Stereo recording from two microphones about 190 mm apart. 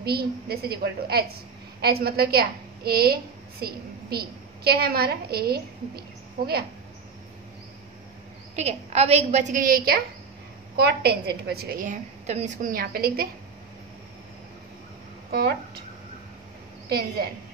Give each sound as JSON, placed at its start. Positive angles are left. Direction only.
{"t": 0.0, "sound": "a woman's voice", "side_deg": -55}
{"t": 8.5, "sound": "a woman's voice", "side_deg": -35}